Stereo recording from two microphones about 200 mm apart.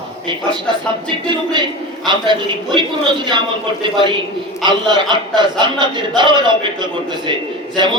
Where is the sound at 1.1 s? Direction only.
25° right (ahead or behind).